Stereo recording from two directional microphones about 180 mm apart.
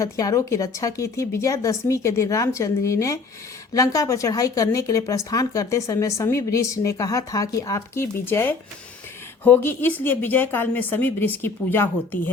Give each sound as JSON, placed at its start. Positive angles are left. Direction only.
{"t": 0.0, "sound": "speech", "side_deg": 20}